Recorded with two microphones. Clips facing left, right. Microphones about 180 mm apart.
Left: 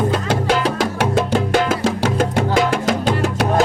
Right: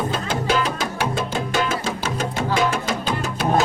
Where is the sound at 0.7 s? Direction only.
85° left.